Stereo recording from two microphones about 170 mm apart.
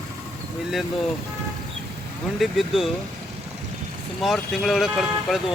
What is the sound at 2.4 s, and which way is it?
Speech, centre (ahead or behind).